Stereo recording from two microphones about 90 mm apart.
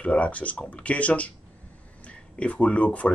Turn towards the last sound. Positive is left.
turn(degrees=15)  # may be behind; listen again after turning